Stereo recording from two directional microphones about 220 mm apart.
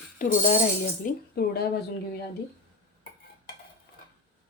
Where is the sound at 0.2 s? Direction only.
35° left (ahead or behind).